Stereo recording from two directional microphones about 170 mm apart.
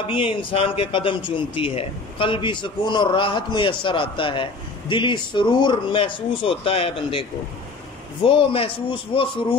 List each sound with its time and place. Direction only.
0.0 s a man's voice: 30° left (ahead or behind)